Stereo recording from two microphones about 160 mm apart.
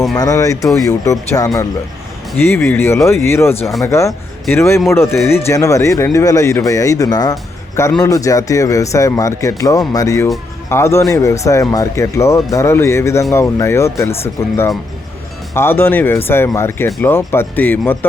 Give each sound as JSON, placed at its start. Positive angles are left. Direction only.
{"t": 0.2, "sound": "speech", "side_deg": 20}